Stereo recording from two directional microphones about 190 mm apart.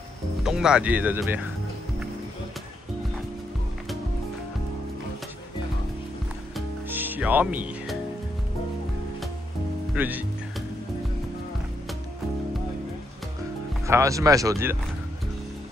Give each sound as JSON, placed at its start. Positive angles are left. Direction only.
{"t": 0.4, "sound": "speech", "side_deg": -5}
{"t": 6.9, "sound": "music", "side_deg": -10}
{"t": 9.9, "sound": "speech", "side_deg": -10}
{"t": 13.8, "sound": "speech", "side_deg": -15}